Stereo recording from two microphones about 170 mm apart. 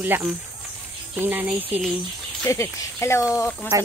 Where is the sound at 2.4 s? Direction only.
15° left (ahead or behind).